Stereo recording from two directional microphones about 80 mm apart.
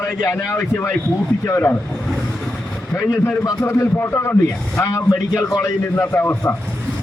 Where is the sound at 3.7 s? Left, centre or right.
Left.